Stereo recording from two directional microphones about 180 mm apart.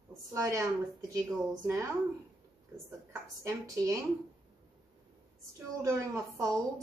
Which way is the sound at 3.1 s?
15° right (ahead or behind).